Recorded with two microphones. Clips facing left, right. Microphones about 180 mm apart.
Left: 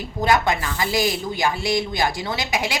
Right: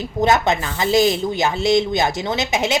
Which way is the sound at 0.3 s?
20° right (ahead or behind).